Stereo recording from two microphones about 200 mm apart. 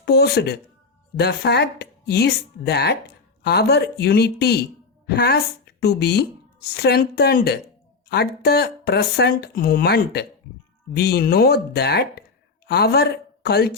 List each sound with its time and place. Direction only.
0.0 s speech: 55° left (ahead or behind)